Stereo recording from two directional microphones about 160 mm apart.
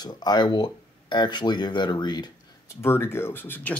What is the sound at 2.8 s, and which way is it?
Speech, 15° left (ahead or behind).